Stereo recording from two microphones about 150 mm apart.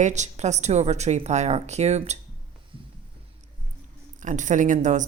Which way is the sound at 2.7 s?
35° right (ahead or behind).